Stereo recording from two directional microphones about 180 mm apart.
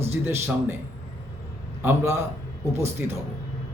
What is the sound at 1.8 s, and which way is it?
Speech, 15° right (ahead or behind).